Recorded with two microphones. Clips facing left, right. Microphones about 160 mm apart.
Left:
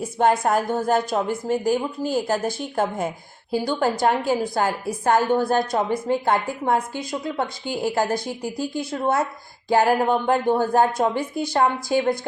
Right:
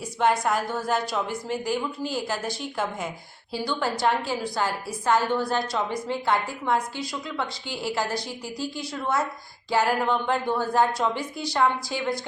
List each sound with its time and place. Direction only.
0.0 s a woman's voice: 45° left (ahead or behind)